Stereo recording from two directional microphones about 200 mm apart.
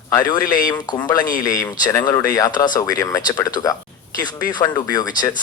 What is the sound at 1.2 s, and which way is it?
Speech, 45° left (ahead or behind).